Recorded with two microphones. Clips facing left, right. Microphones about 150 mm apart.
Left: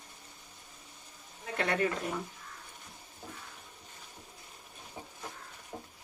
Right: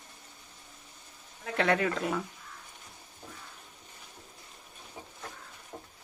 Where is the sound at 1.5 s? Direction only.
90° right.